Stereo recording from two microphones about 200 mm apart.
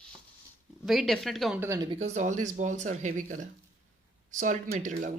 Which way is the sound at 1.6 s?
15° right (ahead or behind).